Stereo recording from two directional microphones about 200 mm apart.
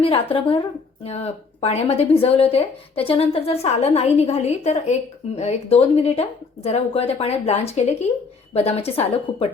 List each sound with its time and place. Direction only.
0.0 s a woman's voice: 25° left (ahead or behind)